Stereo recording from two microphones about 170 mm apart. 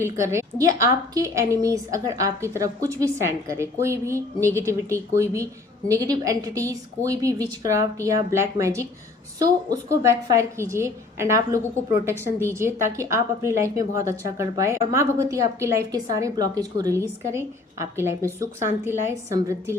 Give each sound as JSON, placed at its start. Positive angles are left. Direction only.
{"t": 0.0, "sound": "a woman's voice", "side_deg": -15}